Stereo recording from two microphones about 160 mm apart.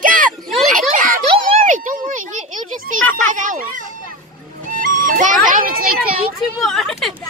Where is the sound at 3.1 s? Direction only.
55° right (ahead or behind).